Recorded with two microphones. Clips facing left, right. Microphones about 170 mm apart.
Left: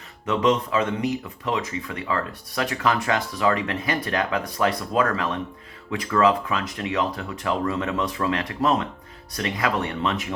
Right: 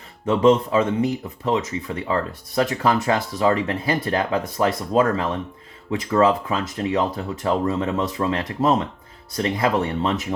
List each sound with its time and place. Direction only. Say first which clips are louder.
0.3 s speech: right 5 dB; 30° right (ahead or behind)